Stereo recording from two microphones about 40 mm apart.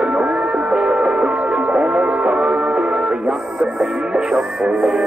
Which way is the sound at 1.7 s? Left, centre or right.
Right.